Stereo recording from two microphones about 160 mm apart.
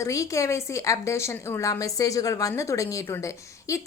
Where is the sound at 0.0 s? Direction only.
20° left (ahead or behind).